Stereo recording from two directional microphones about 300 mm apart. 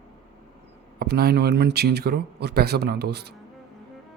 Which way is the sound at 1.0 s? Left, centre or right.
Right.